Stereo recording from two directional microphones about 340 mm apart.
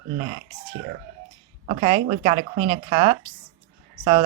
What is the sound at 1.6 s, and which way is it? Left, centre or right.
Speech, centre.